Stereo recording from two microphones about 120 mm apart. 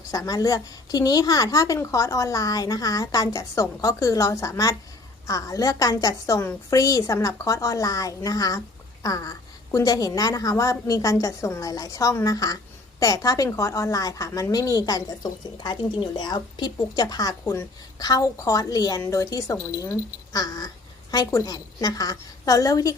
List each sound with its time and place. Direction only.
0.1 s a woman's voice: 30° left (ahead or behind)